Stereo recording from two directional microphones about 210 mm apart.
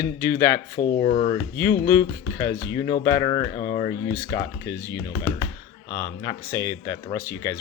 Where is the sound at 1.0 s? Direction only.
30° left (ahead or behind).